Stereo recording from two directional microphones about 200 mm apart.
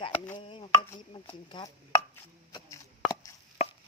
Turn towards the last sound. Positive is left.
turn(degrees=30)  # may be behind; listen again after turning